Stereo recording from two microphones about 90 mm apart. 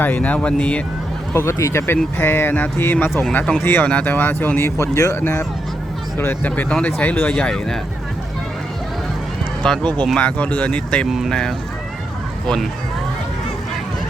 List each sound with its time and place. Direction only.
0.0 s speech: 20° left (ahead or behind)
1.3 s speech: 30° left (ahead or behind)
3.3 s speech: 10° left (ahead or behind)
3.6 s speech: 25° left (ahead or behind)
5.1 s speech: 20° left (ahead or behind)
7.3 s speech: 10° left (ahead or behind)
9.6 s speech: 5° left (ahead or behind)